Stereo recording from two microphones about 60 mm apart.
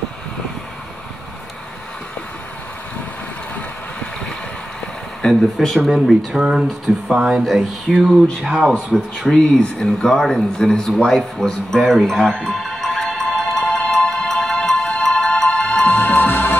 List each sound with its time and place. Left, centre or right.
5.4 s speech: centre
5.9 s speech: centre
7.4 s speech: centre
9.3 s speech: centre
11.0 s music: centre
15.8 s music: left